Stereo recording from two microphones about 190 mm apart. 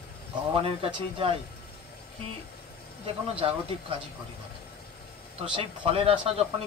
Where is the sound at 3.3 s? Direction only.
30° right (ahead or behind).